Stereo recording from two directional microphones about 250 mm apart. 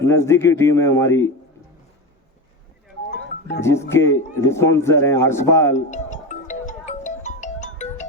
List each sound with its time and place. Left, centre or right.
0.0 s a man's voice: centre
3.6 s a man's voice: centre
5.9 s music: left